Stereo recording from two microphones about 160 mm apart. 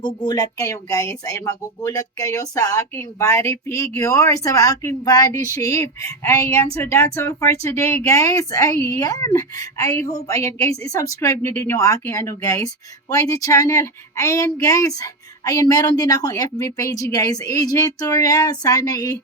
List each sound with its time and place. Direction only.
0.0 s speech: 30° left (ahead or behind)